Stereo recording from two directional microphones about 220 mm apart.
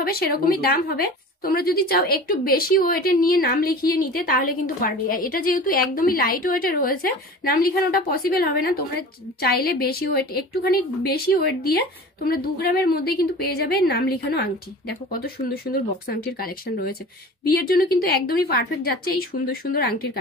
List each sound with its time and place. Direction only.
0.0 s a woman's voice: 45° left (ahead or behind)